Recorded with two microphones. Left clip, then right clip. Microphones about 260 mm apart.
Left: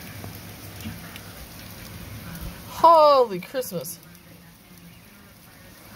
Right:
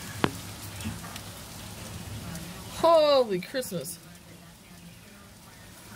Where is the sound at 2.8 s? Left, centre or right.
Centre.